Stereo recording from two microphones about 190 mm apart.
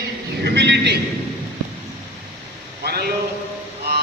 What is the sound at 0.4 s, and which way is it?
Speech, 65° right (ahead or behind).